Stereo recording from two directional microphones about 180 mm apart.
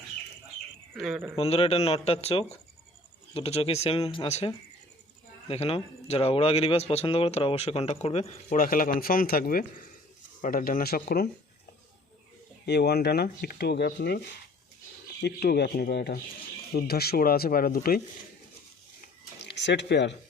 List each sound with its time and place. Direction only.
0.9 s speech: centre (ahead or behind)
1.4 s speech: 35° left (ahead or behind)
8.5 s a man's voice: 50° left (ahead or behind)
12.6 s speech: 65° left (ahead or behind)
15.2 s speech: 65° left (ahead or behind)
19.0 s a sound: 70° left (ahead or behind)